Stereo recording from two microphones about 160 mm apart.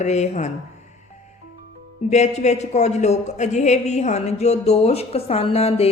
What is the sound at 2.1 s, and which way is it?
Speech, 45° left (ahead or behind).